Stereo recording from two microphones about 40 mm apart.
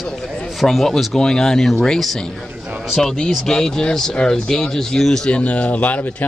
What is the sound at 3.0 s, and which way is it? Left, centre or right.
Speech, centre.